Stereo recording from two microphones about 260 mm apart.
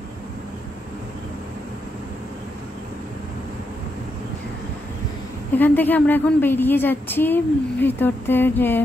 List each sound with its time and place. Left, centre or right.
5.5 s a woman's voice: centre